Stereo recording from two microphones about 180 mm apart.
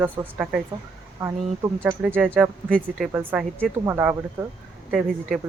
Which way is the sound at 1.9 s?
5° right (ahead or behind).